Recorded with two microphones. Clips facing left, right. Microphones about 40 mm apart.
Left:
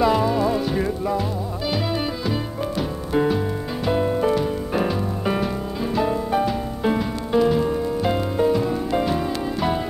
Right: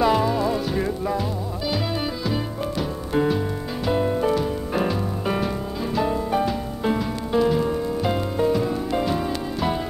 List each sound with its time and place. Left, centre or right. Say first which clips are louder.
0.0 s music: left 1 dB; centre
3.1 s music: left 1 dB; centre